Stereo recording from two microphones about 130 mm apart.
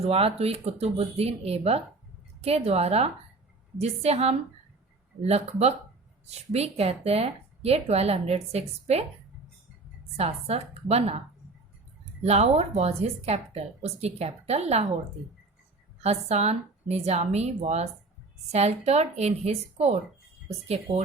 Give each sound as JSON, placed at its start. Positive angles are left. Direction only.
{"t": 0.0, "sound": "a woman's voice", "side_deg": -50}
{"t": 10.2, "sound": "a woman's voice", "side_deg": -50}
{"t": 12.2, "sound": "a woman's voice", "side_deg": -55}
{"t": 16.0, "sound": "a woman's voice", "side_deg": -55}